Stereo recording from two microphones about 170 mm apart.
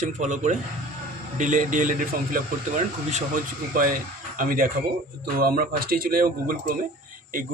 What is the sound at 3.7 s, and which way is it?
Speech, 55° right (ahead or behind).